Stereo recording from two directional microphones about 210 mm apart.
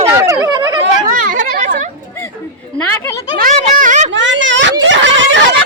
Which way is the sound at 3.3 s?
40° right (ahead or behind).